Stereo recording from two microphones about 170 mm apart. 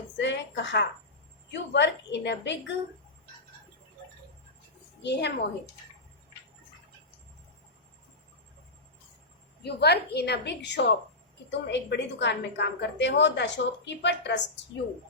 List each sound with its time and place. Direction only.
0.2 s a sound: 90° left
1.5 s a woman's voice: 90° left
5.0 s a woman's voice: 85° left
9.6 s a woman's voice: 75° left (ahead or behind)